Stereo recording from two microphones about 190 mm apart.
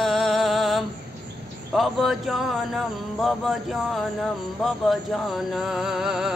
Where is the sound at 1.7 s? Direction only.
Centre (ahead or behind).